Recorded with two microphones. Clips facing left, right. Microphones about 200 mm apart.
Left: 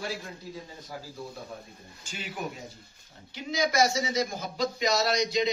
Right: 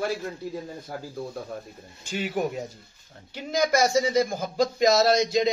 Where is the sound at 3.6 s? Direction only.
50° right (ahead or behind).